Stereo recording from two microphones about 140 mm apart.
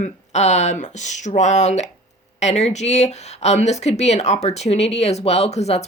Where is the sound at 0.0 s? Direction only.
55° left (ahead or behind).